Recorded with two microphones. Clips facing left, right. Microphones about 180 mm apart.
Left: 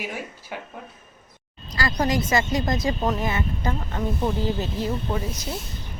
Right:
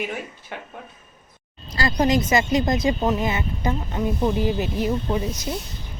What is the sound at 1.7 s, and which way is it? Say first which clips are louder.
A woman's voice: right 3 dB; 20° right (ahead or behind).